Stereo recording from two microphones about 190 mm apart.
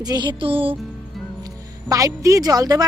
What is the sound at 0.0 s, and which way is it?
Speech, 20° right (ahead or behind).